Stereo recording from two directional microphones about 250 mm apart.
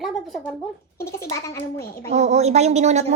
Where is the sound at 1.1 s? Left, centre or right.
Centre.